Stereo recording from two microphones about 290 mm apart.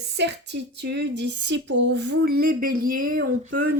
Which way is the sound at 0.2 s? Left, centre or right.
Right.